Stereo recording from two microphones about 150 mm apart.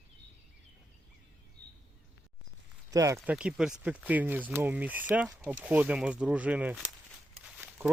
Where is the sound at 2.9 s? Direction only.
20° right (ahead or behind).